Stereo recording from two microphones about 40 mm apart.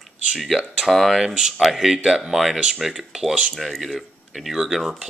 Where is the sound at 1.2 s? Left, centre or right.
Centre.